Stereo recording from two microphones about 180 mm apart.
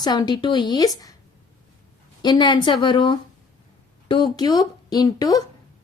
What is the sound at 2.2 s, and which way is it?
Speech, 25° left (ahead or behind).